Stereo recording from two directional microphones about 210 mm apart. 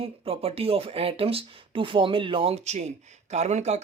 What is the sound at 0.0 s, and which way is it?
Speech, 25° right (ahead or behind).